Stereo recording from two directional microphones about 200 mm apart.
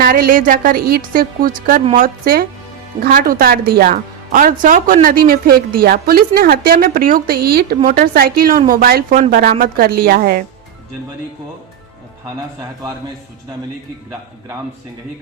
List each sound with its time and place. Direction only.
0.0 s a woman's voice: 45° right (ahead or behind)